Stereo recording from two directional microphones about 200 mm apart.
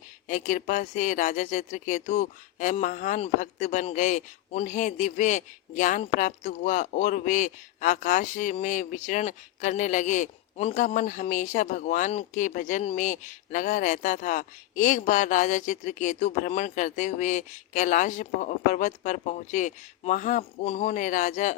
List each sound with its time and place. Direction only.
0.3 s speech: 40° left (ahead or behind)